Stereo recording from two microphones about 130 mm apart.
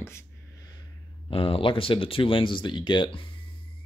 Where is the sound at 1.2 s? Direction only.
45° left (ahead or behind).